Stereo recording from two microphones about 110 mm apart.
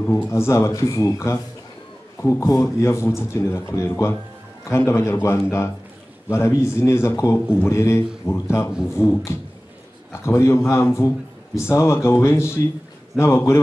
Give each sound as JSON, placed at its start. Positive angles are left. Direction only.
{"t": 0.1, "sound": "a man's voice", "side_deg": 25}